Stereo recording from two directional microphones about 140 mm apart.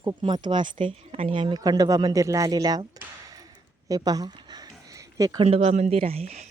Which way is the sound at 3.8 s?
25° right (ahead or behind).